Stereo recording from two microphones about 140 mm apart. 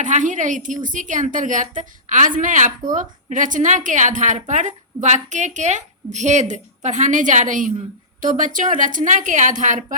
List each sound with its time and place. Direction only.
0.0 s a woman's voice: 65° right (ahead or behind)